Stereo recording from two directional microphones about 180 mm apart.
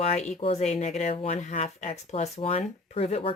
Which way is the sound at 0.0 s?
35° left (ahead or behind).